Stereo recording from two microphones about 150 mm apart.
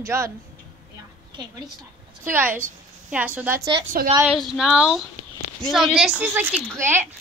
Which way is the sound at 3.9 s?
70° right (ahead or behind).